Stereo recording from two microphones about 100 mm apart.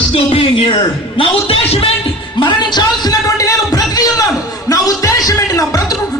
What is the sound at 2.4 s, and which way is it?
A man's voice, 50° left (ahead or behind).